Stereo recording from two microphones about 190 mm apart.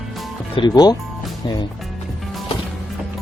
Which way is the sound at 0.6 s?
20° left (ahead or behind).